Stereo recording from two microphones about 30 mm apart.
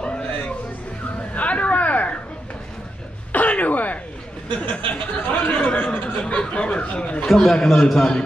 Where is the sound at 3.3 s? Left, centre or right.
Left.